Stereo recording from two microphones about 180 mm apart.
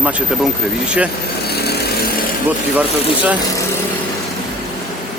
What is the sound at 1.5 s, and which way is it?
Chainsaw, 65° left (ahead or behind).